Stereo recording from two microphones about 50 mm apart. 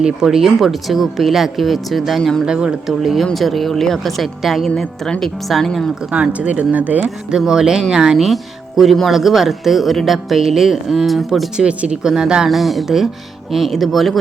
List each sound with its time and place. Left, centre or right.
0.0 s speech: centre
2.5 s speech: centre
3.0 s speech: centre
6.1 s speech: right
7.3 s speech: centre
11.5 s speech: centre